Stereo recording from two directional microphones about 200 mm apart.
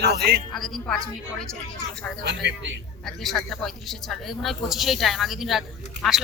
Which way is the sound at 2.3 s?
60° right (ahead or behind).